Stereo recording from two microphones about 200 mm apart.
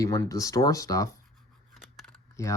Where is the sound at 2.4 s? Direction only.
15° left (ahead or behind).